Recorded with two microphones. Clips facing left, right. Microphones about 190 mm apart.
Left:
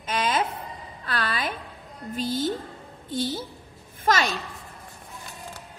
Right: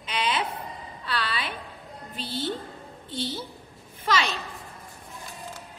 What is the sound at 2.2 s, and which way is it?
A woman's voice, 45° left (ahead or behind).